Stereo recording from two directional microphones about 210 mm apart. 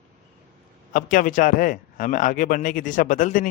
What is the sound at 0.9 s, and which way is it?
A man's voice, 40° left (ahead or behind).